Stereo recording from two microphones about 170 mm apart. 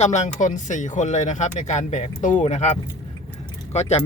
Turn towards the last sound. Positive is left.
turn(degrees=40)  # may be behind; listen again after turning